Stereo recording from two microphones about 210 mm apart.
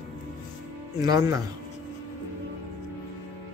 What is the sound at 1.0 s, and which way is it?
Speech, 15° right (ahead or behind).